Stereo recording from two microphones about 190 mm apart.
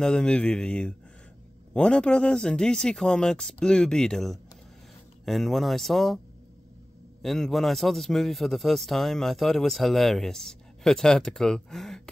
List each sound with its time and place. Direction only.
0.0 s a man's voice: 5° left (ahead or behind)